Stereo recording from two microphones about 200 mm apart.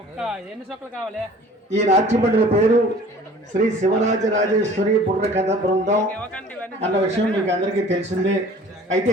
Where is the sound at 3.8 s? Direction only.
35° right (ahead or behind).